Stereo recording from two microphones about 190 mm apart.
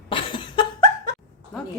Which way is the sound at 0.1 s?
25° left (ahead or behind).